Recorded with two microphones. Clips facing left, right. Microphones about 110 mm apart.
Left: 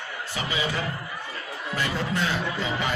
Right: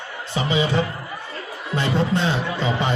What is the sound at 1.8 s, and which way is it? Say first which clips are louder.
Speech: right 6 dB; 25° right (ahead or behind).